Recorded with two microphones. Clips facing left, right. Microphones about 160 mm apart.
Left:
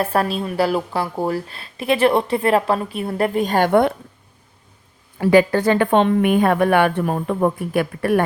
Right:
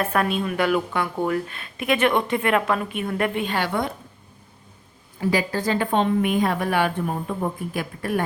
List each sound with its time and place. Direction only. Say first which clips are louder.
0.0 s a woman's voice: left 2 dB; 35° left (ahead or behind); by 3.9 s 60° left (ahead or behind)
5.2 s a woman's voice: left 9 dB; 60° left (ahead or behind)